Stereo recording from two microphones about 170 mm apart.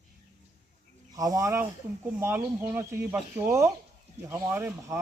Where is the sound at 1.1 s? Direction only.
20° right (ahead or behind).